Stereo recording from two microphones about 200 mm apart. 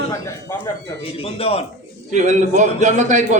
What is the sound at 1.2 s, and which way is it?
Speech, 30° left (ahead or behind).